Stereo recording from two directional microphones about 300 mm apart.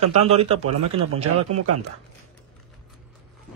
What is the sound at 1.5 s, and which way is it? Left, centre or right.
Speech, right.